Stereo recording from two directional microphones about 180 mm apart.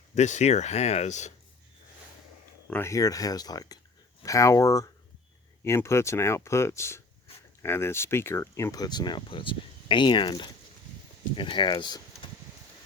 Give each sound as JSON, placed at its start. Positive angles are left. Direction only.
{"t": 0.1, "sound": "speech", "side_deg": 40}
{"t": 2.6, "sound": "speech", "side_deg": 10}